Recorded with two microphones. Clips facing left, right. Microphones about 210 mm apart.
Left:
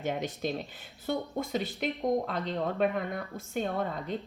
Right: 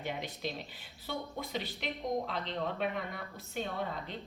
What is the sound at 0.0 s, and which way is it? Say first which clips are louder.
A woman's voice: left 6 dB; 45° left (ahead or behind).